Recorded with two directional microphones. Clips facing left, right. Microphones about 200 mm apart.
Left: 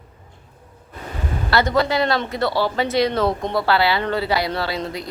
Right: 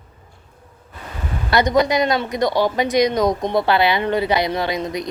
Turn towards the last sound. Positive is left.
turn(degrees=-15)  # may be behind; listen again after turning